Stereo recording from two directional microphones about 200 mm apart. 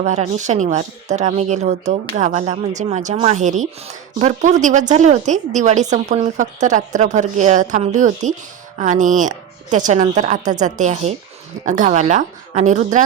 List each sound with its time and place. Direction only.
0.0 s a woman's voice: 35° right (ahead or behind)